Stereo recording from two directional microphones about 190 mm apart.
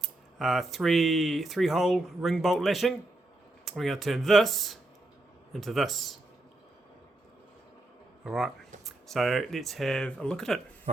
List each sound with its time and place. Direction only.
0.0 s speech: centre (ahead or behind)
8.2 s speech: centre (ahead or behind)
10.9 s speech: 35° right (ahead or behind)